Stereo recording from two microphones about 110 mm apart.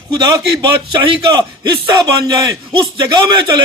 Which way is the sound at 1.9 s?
35° right (ahead or behind).